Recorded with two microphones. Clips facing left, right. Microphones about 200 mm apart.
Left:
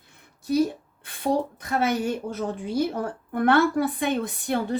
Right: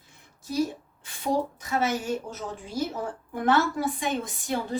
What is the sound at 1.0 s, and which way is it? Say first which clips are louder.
A woman's voice: left 2 dB; 60° left (ahead or behind).